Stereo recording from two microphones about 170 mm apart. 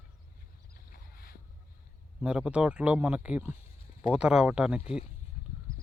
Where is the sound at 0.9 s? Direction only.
60° left (ahead or behind).